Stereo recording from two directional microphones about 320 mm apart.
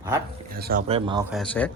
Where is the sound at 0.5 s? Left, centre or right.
Right.